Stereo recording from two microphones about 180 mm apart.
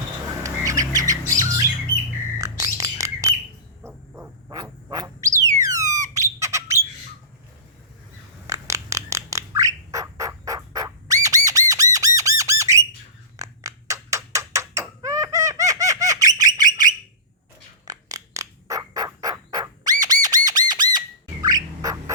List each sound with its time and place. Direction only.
0.4 s squawk: 20° right (ahead or behind)
2.4 s bird: 20° right (ahead or behind)
3.8 s owl: 10° right (ahead or behind)
4.5 s bird: 20° right (ahead or behind)
5.5 s a sound: 20° right (ahead or behind)
8.4 s bird: 15° right (ahead or behind)
11.7 s squawk: 20° right (ahead or behind)
13.4 s a sound: 20° right (ahead or behind)
17.8 s turkey: 20° right (ahead or behind)
21.4 s bird: 20° right (ahead or behind)